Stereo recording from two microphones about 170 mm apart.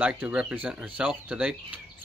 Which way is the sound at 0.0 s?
5° right (ahead or behind).